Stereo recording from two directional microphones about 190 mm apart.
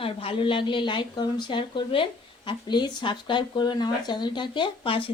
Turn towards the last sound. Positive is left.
turn(degrees=25)  # may be behind; listen again after turning